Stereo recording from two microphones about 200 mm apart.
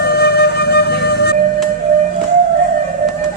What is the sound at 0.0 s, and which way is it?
Flute, 50° left (ahead or behind).